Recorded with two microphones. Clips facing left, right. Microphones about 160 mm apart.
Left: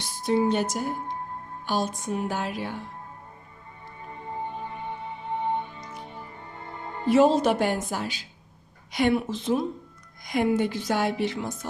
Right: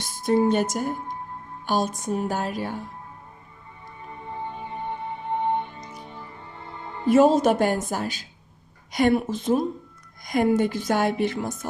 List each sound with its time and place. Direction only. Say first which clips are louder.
0.0 s a woman's voice: right 3 dB; 50° right (ahead or behind)
4.9 s music: right 5 dB; 60° right (ahead or behind)
7.1 s a woman's voice: right 2 dB; 45° right (ahead or behind)